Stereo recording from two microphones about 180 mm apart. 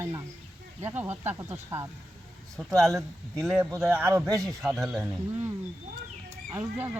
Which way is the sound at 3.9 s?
15° right (ahead or behind).